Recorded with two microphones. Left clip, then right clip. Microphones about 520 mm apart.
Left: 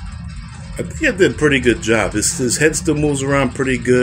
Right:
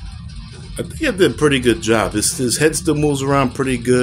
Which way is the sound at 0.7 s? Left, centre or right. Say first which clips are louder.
Left 2 dB; right.